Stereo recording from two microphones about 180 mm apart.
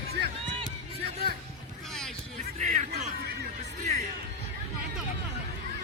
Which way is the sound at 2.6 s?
40° right (ahead or behind).